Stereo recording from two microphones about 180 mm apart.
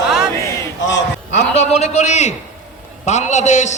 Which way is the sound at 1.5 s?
40° left (ahead or behind).